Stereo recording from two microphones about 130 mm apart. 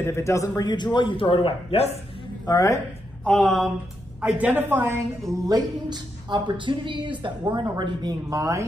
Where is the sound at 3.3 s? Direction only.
Centre (ahead or behind).